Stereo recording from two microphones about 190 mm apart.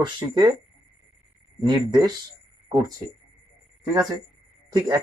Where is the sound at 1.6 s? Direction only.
20° right (ahead or behind).